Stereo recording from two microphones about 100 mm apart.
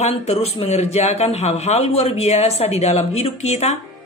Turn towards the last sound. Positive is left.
turn(degrees=90)